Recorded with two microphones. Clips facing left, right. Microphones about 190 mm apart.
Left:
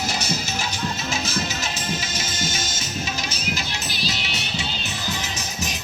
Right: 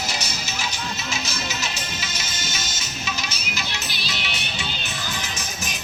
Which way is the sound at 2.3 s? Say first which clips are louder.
Left 6 dB; 45° left (ahead or behind).